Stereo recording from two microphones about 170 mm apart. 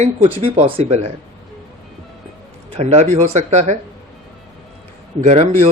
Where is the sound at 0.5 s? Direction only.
45° right (ahead or behind).